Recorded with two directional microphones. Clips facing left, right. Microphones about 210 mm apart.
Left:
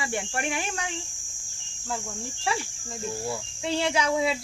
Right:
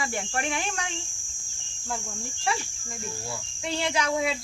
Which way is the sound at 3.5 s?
25° left (ahead or behind).